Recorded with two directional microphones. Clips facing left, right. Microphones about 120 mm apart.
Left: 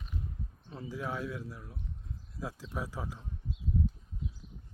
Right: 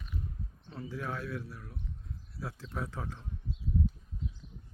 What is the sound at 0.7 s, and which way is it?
A man's voice, 20° left (ahead or behind).